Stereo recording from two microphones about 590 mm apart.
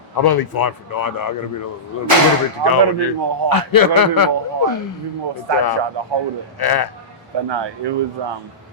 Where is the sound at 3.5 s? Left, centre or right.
Left.